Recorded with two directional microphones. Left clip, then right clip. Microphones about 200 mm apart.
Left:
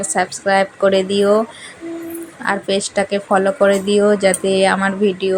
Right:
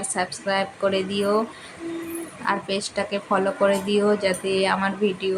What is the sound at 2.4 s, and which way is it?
Speech, 25° left (ahead or behind).